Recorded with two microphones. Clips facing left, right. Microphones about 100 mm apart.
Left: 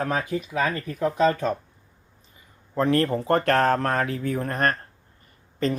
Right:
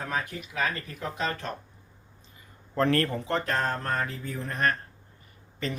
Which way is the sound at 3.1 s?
45° left (ahead or behind).